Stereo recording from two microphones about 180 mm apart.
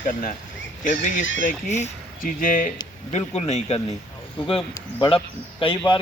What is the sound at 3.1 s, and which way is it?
Speech, 35° left (ahead or behind).